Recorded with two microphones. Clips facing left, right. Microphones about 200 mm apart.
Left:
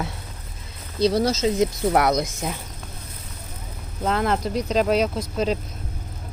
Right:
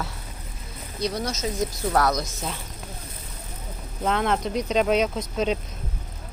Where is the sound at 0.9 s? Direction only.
30° left (ahead or behind).